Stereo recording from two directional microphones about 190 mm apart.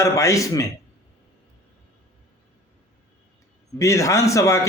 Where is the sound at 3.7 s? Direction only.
15° left (ahead or behind).